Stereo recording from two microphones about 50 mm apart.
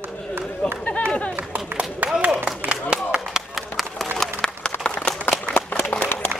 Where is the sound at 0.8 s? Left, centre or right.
Left.